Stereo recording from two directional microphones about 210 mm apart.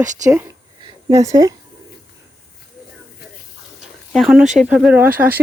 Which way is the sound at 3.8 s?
Centre (ahead or behind).